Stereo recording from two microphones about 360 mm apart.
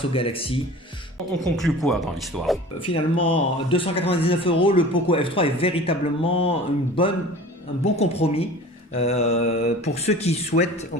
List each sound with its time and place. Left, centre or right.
0.1 s speech: centre
1.6 s speech: centre
2.9 s speech: centre